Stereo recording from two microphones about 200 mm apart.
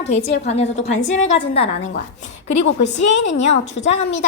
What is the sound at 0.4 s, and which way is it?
A woman's voice, 35° left (ahead or behind).